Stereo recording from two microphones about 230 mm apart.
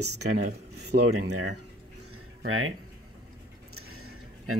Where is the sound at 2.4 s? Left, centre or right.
Right.